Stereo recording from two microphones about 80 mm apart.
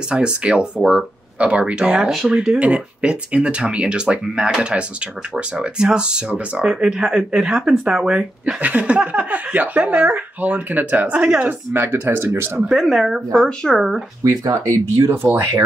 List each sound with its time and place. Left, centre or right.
0.1 s speech: centre
8.5 s speech: centre
11.7 s speech: right
12.6 s speech: centre
13.4 s speech: centre
13.7 s speech: centre
14.2 s speech: right